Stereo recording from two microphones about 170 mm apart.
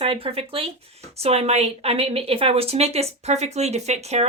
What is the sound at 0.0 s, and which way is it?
A woman's voice, 35° right (ahead or behind).